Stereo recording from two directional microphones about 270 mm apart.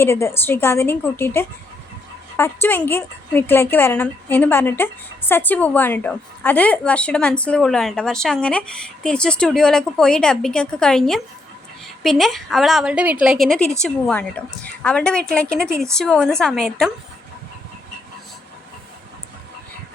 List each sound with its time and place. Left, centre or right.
0.0 s a woman's voice: centre